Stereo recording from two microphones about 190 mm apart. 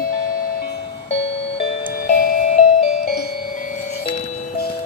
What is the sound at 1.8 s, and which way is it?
Music, 45° left (ahead or behind).